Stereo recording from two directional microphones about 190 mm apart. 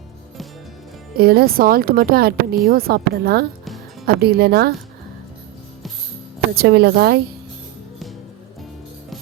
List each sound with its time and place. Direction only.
1.1 s speech: 50° right (ahead or behind)
6.6 s speech: 60° right (ahead or behind)